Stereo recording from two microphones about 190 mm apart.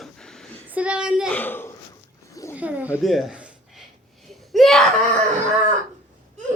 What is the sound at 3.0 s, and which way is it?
Speech, centre (ahead or behind).